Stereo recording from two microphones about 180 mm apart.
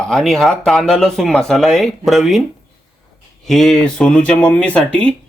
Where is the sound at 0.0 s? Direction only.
Centre (ahead or behind).